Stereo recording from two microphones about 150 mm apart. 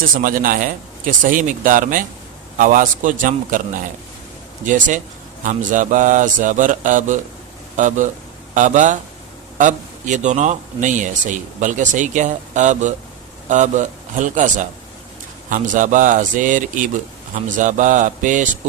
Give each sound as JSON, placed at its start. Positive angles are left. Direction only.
{"t": 0.2, "sound": "a man's voice", "side_deg": -65}